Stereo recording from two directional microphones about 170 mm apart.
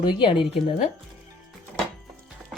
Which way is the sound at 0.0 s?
30° left (ahead or behind).